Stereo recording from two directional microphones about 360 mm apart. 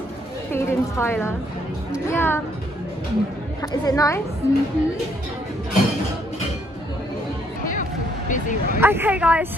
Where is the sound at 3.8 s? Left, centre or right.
Centre.